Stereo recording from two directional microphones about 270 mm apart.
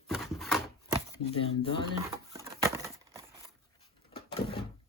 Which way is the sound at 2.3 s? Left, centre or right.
Centre.